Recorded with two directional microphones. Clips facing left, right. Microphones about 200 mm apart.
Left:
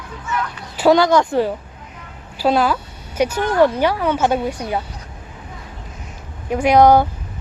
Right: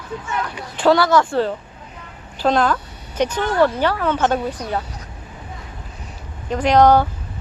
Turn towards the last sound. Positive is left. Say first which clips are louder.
# left 2 dB
turn(degrees=10)  # may be behind; listen again after turning